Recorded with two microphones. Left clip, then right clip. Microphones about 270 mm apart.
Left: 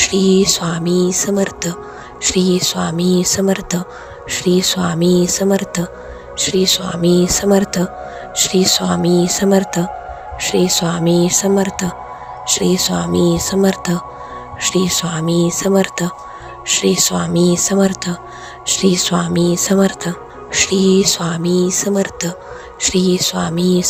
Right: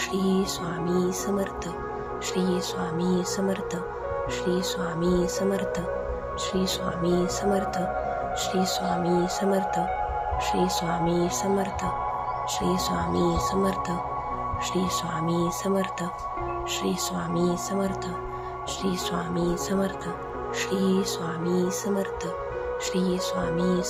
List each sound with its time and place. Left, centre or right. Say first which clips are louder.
0.0 s speech: left 13 dB; left